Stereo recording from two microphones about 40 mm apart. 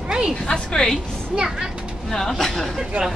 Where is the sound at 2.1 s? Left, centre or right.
Centre.